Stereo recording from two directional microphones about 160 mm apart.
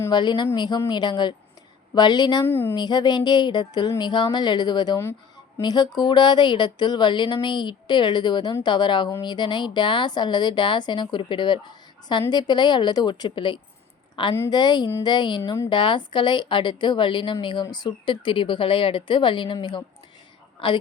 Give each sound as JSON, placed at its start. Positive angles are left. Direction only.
{"t": 0.0, "sound": "speech", "side_deg": 25}
{"t": 2.5, "sound": "speech", "side_deg": 15}
{"t": 2.7, "sound": "speech", "side_deg": 25}
{"t": 14.3, "sound": "speech", "side_deg": 15}
{"t": 14.6, "sound": "speech", "side_deg": 25}